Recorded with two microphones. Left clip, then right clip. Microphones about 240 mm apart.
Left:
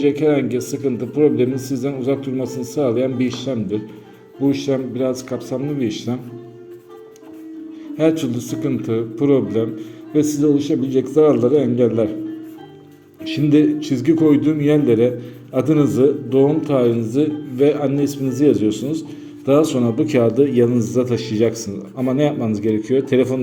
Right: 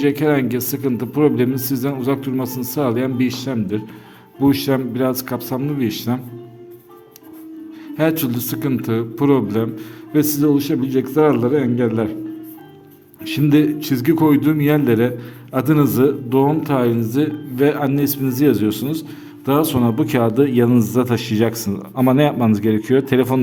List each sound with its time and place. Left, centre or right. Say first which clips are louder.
0.0 s a man's voice: left 1 dB; right
7.9 s a man's voice: left 1 dB; right
13.2 s a man's voice: left 1 dB; right